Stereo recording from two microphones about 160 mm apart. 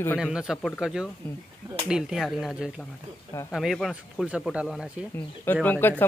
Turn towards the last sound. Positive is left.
turn(degrees=10)  # may be behind; listen again after turning